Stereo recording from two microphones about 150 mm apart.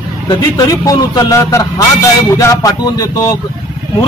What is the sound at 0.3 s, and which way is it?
A man's voice, 25° left (ahead or behind).